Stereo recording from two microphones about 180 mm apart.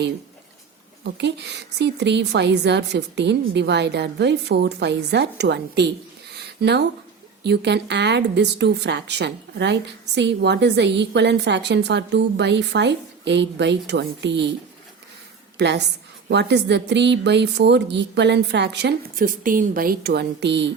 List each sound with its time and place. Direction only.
1.0 s a woman's voice: 70° right (ahead or behind)
6.3 s a sound: 70° right (ahead or behind)
7.4 s a woman's voice: 70° right (ahead or behind)
15.5 s a woman's voice: 75° right (ahead or behind)
19.1 s speech: 50° right (ahead or behind); by 20.7 s 70° right (ahead or behind)